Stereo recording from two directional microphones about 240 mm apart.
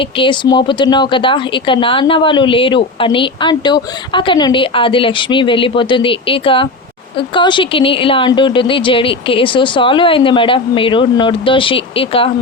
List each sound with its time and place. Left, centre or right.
0.0 s speech: centre